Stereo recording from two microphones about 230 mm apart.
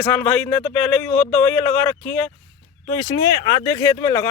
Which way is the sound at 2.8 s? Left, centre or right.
Centre.